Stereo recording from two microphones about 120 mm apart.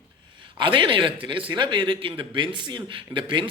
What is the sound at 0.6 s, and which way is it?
A man's voice, 40° right (ahead or behind).